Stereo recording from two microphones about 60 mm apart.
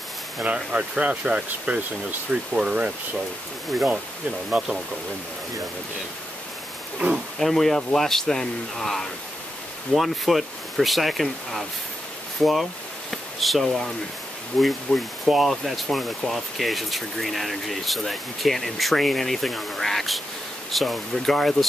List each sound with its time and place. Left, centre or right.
0.4 s speech: centre
4.5 s speech: centre
7.3 s speech: centre